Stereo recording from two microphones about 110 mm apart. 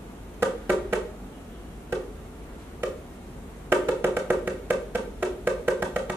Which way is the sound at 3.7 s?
20° right (ahead or behind).